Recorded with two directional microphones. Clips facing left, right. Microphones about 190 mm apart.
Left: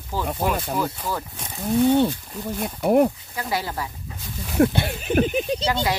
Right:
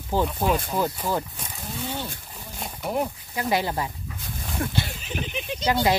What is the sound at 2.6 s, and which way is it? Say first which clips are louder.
Speech: left 9 dB; 55° left (ahead or behind).